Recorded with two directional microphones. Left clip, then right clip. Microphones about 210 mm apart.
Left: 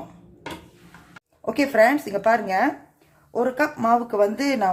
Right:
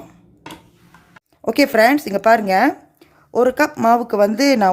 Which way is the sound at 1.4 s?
50° right (ahead or behind).